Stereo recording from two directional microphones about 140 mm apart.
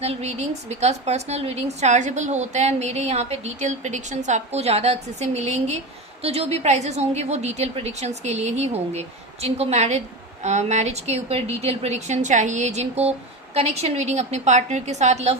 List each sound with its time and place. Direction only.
0.0 s a woman's voice: 50° right (ahead or behind)